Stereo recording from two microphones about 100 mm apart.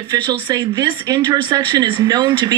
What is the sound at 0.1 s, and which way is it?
Speech, 45° right (ahead or behind).